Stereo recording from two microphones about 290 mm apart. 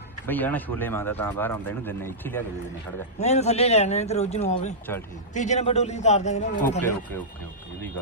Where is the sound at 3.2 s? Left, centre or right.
Left.